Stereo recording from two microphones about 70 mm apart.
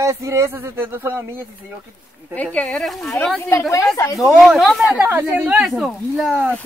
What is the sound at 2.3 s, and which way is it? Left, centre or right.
Speech, centre.